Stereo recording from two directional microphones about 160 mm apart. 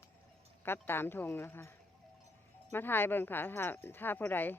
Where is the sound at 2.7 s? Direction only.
15° left (ahead or behind).